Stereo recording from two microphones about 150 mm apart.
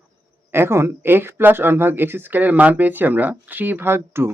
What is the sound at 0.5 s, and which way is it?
Speech, 15° right (ahead or behind).